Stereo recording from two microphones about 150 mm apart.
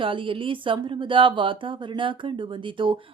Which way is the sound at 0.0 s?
35° right (ahead or behind).